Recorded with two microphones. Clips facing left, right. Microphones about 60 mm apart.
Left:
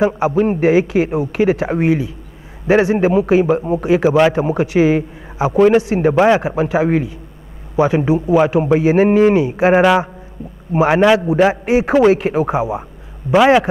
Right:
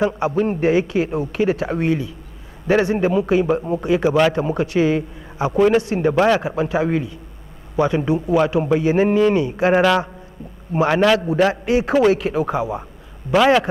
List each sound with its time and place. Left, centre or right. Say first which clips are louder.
0.4 s a man's voice: left 4 dB; centre